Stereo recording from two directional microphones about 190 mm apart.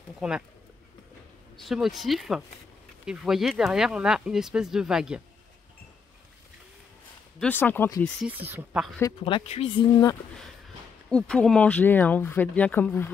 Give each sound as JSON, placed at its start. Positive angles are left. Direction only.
{"t": 0.2, "sound": "speech", "side_deg": -5}
{"t": 1.6, "sound": "speech", "side_deg": 0}
{"t": 7.3, "sound": "speech", "side_deg": 10}
{"t": 8.5, "sound": "speech", "side_deg": -5}
{"t": 9.2, "sound": "speech", "side_deg": 30}
{"t": 11.1, "sound": "speech", "side_deg": 5}